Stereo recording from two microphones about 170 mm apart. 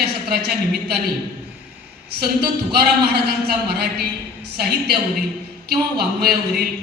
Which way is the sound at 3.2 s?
65° right (ahead or behind).